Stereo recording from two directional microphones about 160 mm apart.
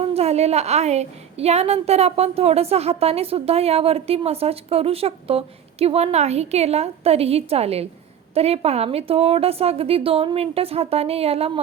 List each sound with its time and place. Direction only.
0.1 s a woman's voice: 40° right (ahead or behind)